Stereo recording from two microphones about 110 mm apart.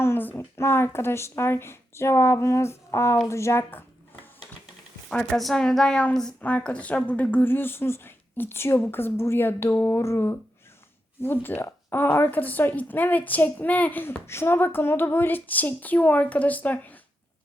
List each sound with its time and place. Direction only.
0.0 s a woman's voice: 20° left (ahead or behind)
5.3 s a woman's voice: 5° left (ahead or behind)